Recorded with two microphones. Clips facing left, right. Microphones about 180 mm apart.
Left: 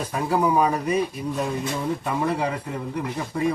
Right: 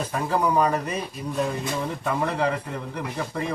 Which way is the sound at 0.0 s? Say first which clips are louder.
Left 2 dB; 10° left (ahead or behind).